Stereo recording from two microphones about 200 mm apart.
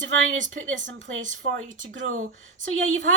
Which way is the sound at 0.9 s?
70° right (ahead or behind).